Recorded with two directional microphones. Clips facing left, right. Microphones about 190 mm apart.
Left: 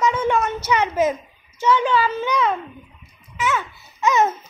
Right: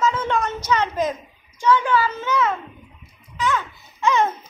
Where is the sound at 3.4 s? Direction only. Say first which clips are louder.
Even; 10° left (ahead or behind).